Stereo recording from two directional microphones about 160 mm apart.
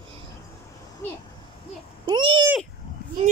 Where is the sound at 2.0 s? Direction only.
30° right (ahead or behind).